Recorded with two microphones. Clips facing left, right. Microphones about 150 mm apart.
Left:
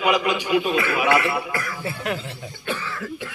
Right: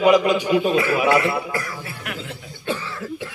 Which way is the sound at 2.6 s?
25° right (ahead or behind).